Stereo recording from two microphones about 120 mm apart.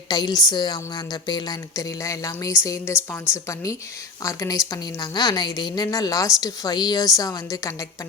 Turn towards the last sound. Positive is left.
turn(degrees=30)  # may be behind; listen again after turning